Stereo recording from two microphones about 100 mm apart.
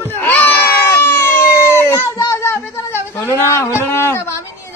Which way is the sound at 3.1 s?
30° left (ahead or behind).